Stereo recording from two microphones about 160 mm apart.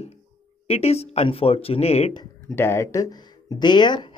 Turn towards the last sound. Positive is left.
turn(degrees=30)  # may be behind; listen again after turning